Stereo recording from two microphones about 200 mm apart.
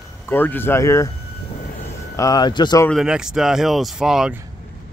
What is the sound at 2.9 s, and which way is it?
Speech, 5° right (ahead or behind).